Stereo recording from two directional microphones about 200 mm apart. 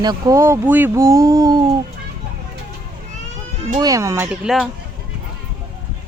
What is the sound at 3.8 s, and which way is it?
Speech, 15° right (ahead or behind).